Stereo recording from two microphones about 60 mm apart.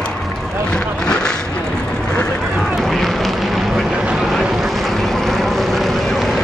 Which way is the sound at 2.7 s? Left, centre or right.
Centre.